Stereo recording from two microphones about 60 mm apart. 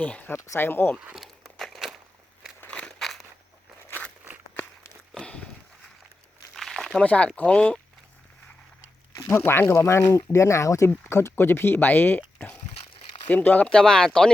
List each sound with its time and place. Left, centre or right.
0.3 s speech: left
0.6 s speech: left
1.5 s a sound: centre
2.6 s a sound: centre
5.1 s a sound: centre
6.5 s crumpling: centre
6.9 s speech: left
9.3 s speech: left
11.0 s speech: left
13.2 s speech: left
13.7 s speech: centre